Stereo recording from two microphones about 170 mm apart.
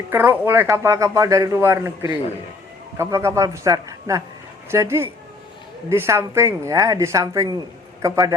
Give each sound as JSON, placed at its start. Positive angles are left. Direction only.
{"t": 0.1, "sound": "speech", "side_deg": -10}